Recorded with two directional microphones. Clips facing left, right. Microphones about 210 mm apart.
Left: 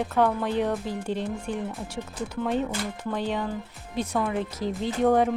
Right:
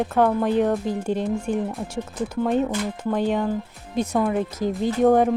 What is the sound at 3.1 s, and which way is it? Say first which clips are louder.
Speech: right 7 dB; 50° right (ahead or behind).